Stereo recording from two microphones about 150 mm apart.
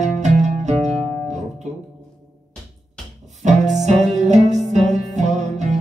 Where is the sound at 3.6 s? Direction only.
Centre (ahead or behind).